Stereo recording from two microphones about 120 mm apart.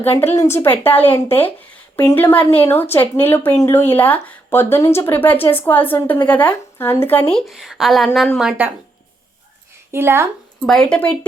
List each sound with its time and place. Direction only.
0.0 s speech: 15° left (ahead or behind)
7.3 s speech: centre (ahead or behind)
9.9 s speech: 20° right (ahead or behind)
10.7 s speech: 5° left (ahead or behind)